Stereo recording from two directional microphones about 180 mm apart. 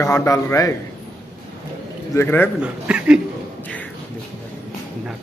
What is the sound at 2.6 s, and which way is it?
Speech, 5° right (ahead or behind).